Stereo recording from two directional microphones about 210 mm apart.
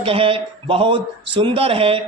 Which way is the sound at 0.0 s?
25° right (ahead or behind).